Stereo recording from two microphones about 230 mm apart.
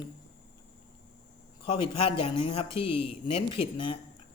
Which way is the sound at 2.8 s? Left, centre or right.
Left.